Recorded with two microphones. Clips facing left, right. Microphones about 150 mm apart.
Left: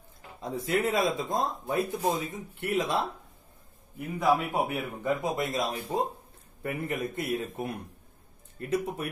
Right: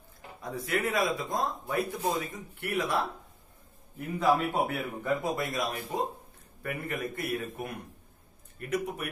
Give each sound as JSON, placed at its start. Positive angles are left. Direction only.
{"t": 0.4, "sound": "speech", "side_deg": 25}
{"t": 4.2, "sound": "speech", "side_deg": 10}